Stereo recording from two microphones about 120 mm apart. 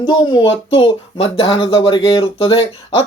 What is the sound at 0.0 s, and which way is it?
Speech, 40° left (ahead or behind).